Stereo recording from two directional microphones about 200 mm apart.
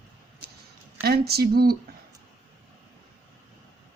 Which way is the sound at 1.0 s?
50° right (ahead or behind).